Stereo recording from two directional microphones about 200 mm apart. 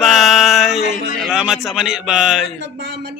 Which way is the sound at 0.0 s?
Centre (ahead or behind).